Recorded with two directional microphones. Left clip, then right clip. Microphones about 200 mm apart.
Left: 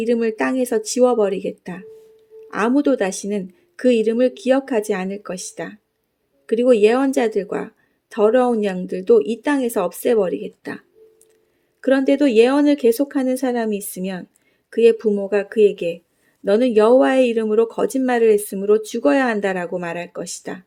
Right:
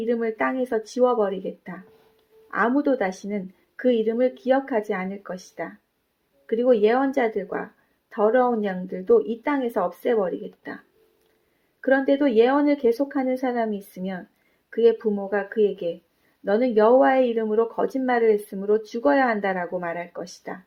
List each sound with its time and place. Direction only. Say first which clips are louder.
0.0 s speech: left 4 dB; 55° left (ahead or behind)
11.8 s speech: left 4 dB; 50° left (ahead or behind)